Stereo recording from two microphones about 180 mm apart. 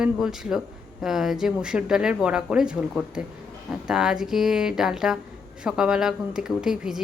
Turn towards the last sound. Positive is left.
turn(degrees=-5)  # may be behind; listen again after turning